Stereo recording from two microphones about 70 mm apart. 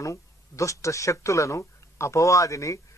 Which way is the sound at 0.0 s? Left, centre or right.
Left.